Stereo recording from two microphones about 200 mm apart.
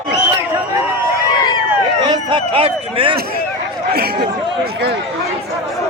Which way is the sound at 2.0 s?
25° right (ahead or behind).